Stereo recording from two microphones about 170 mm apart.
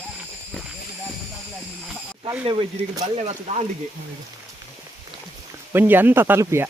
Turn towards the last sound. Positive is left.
turn(degrees=-15)  # may be behind; listen again after turning